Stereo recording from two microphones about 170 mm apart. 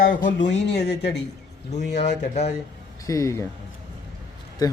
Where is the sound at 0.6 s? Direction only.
75° left (ahead or behind).